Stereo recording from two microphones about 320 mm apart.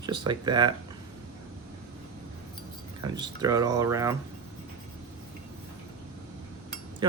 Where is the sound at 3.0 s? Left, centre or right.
Centre.